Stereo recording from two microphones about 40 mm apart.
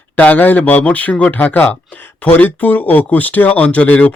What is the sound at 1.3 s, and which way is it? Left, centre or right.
Speech, left.